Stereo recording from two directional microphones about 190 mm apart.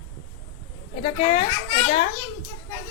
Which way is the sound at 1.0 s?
30° left (ahead or behind).